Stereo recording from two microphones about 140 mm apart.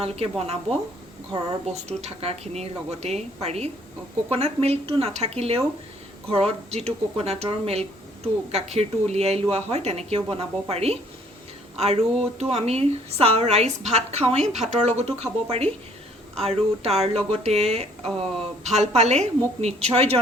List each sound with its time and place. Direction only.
0.0 s speech: 45° right (ahead or behind)